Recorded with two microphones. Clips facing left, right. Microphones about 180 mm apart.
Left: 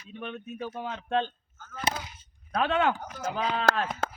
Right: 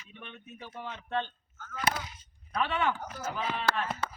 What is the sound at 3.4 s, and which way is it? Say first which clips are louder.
Speech: left 5 dB; 85° left.